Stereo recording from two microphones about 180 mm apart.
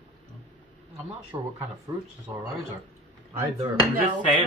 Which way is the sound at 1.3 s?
25° right (ahead or behind).